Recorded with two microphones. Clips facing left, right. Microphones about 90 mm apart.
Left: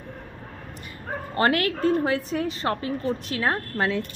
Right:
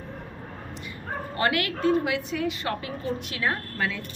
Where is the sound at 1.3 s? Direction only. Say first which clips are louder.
Left 4 dB; 40° left (ahead or behind).